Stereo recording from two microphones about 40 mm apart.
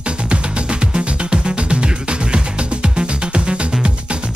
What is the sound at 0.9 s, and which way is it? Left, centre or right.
Music, right.